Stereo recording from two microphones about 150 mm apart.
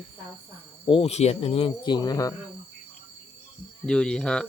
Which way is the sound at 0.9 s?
40° left (ahead or behind).